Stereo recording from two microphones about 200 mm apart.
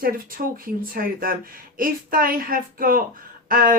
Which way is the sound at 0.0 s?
45° right (ahead or behind).